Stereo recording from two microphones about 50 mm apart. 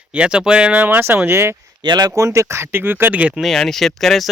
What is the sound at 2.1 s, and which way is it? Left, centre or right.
Speech, right.